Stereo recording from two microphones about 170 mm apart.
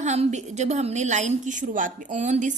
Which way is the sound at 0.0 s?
40° right (ahead or behind).